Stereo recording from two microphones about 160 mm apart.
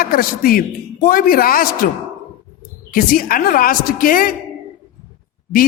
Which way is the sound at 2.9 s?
65° left (ahead or behind).